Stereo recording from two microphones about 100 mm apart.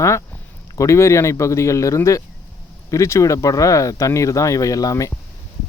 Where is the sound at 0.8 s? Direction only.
30° left (ahead or behind).